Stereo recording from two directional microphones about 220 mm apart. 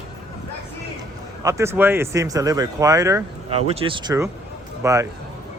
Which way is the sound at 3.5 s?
25° right (ahead or behind).